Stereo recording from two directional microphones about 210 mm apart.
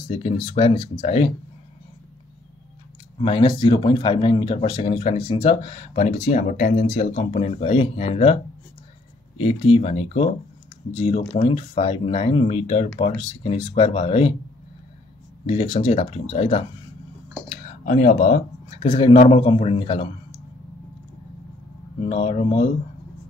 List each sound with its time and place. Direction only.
0.1 s speech: 25° left (ahead or behind)
3.2 s speech: 25° left (ahead or behind)
9.4 s speech: 25° left (ahead or behind)
15.4 s speech: 25° left (ahead or behind)
17.5 s a sound: 40° left (ahead or behind)
18.9 s speech: 25° left (ahead or behind)
22.0 s speech: 30° left (ahead or behind)